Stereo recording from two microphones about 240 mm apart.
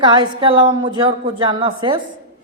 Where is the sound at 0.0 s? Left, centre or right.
Centre.